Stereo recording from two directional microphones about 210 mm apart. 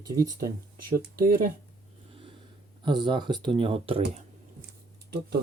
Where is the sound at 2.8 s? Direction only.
20° right (ahead or behind).